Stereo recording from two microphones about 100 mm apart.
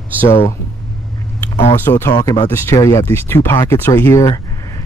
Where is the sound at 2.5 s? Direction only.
30° left (ahead or behind).